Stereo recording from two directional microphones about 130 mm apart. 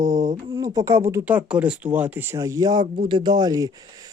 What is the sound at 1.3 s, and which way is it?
Speech, 10° right (ahead or behind).